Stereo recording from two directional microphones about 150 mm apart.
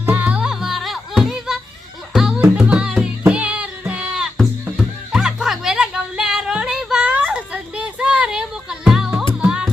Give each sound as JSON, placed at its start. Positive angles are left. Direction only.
{"t": 0.0, "sound": "music", "side_deg": -10}